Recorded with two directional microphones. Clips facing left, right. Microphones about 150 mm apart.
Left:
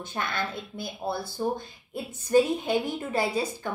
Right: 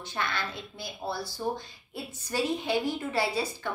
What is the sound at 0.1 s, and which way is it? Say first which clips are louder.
A woman's voice: left 2 dB; 50° left (ahead or behind).